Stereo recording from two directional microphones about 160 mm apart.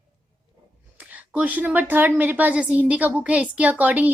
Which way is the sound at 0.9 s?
10° right (ahead or behind).